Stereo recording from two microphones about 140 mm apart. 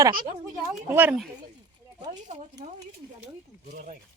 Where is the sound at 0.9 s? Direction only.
15° right (ahead or behind).